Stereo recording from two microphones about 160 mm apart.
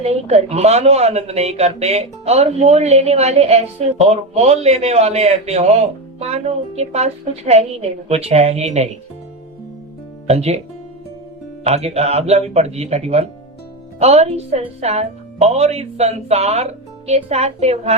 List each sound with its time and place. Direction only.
0.0 s a man's voice: 40° right (ahead or behind)
10.2 s a man's voice: 40° right (ahead or behind)
11.6 s a man's voice: 40° right (ahead or behind)